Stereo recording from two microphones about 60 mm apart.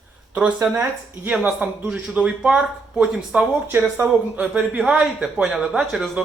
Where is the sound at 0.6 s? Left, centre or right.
Right.